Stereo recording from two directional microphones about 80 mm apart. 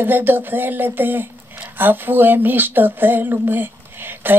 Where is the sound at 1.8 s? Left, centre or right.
Right.